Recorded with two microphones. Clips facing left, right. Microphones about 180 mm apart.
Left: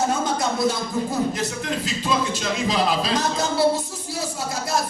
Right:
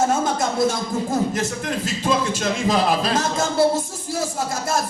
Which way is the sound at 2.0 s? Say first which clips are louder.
Right 3 dB; 50° right (ahead or behind).